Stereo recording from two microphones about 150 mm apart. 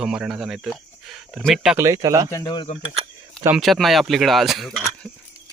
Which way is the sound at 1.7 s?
20° right (ahead or behind).